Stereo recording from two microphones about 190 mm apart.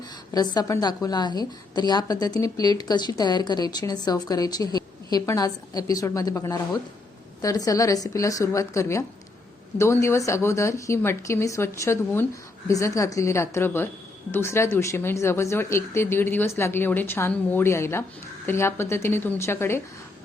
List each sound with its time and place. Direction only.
0.3 s a woman's voice: 20° left (ahead or behind)